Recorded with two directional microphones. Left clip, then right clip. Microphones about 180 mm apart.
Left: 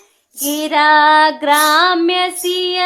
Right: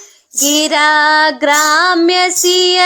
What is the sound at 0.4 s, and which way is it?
Child singing, 25° right (ahead or behind).